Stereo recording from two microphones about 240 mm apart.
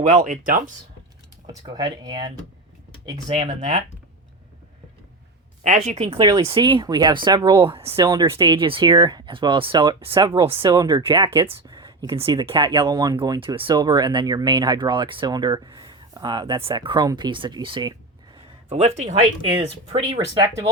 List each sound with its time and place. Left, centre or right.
0.0 s speech: right
1.6 s speech: centre
5.6 s speech: right